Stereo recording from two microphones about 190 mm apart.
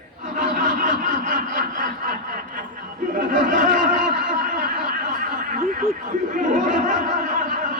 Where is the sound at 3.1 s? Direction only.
45° right (ahead or behind).